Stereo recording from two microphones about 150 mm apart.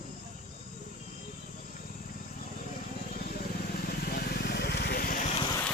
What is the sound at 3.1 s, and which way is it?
Vehicle, 90° left.